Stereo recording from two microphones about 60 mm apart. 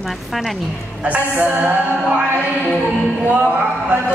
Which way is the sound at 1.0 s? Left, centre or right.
Right.